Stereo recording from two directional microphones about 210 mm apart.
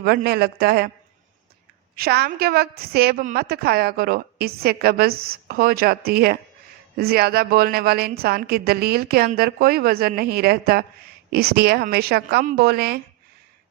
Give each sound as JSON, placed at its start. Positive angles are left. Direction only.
{"t": 0.0, "sound": "a woman's voice", "side_deg": -50}
{"t": 2.0, "sound": "a woman's voice", "side_deg": -50}